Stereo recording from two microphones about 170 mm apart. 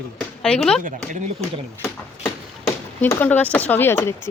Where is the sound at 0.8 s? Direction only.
50° right (ahead or behind).